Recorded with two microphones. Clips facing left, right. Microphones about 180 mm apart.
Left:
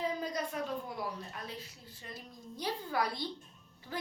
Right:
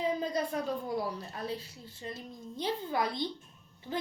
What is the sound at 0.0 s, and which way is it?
A woman's voice, 25° right (ahead or behind).